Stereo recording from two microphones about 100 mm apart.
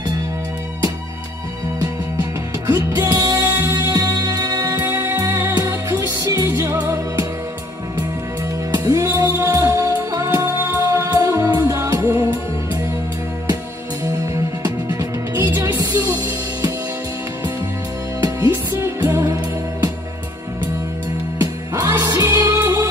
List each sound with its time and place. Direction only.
3.0 s music: 40° right (ahead or behind)
3.3 s music: 20° right (ahead or behind)
3.7 s music: 40° right (ahead or behind)
4.8 s music: 20° right (ahead or behind)
8.7 s music: 35° right (ahead or behind)
14.2 s music: 35° right (ahead or behind)
15.6 s music: 35° right (ahead or behind)
18.2 s music: 30° right (ahead or behind)
21.4 s music: 35° right (ahead or behind)